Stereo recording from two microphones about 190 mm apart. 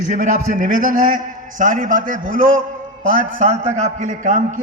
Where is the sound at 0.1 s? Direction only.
40° right (ahead or behind).